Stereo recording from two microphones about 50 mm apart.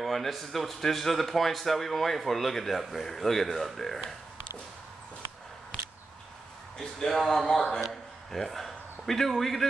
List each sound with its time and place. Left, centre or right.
0.0 s speech: centre
6.8 s a man's voice: centre